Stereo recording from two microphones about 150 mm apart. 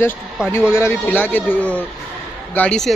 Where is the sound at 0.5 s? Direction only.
15° left (ahead or behind).